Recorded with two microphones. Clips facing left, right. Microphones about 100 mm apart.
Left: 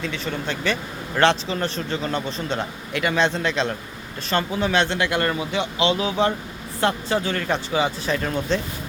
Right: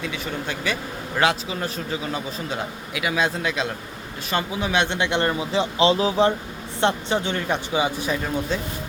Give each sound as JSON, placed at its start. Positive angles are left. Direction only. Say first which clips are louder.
{"t": 0.0, "sound": "a man's voice", "louder": "left 1 dB", "side_deg": -10}